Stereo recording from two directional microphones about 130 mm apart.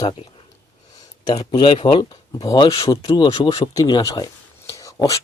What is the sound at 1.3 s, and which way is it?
Speech, 35° left (ahead or behind).